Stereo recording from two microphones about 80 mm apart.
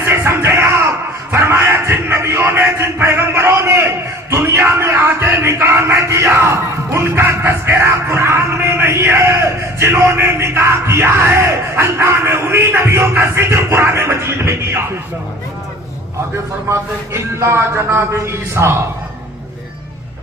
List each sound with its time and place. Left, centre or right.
0.0 s music: right
1.3 s a sound: right
16.6 s a man's voice: right